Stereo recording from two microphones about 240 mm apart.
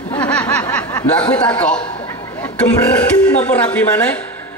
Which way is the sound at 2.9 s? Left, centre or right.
Centre.